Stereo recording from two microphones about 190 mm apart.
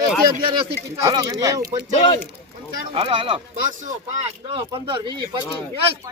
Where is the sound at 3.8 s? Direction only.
40° right (ahead or behind).